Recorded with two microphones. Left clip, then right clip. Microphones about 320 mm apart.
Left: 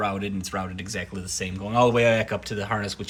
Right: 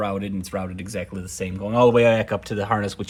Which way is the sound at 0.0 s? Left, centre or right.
Centre.